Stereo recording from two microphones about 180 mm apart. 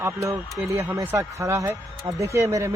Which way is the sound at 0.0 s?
15° right (ahead or behind).